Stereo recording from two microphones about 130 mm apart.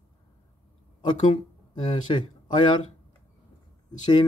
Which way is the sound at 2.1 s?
35° left (ahead or behind).